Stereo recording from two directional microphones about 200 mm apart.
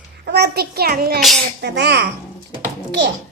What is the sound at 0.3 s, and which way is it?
A child's voice, 55° right (ahead or behind).